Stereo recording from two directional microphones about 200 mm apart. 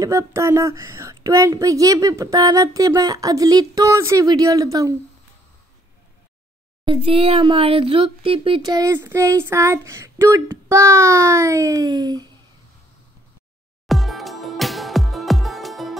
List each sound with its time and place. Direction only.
0.0 s speech: 15° right (ahead or behind)
6.8 s speech: 25° right (ahead or behind)
13.8 s music: centre (ahead or behind)